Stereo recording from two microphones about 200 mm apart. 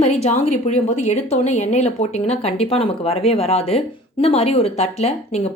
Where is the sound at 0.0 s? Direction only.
35° left (ahead or behind).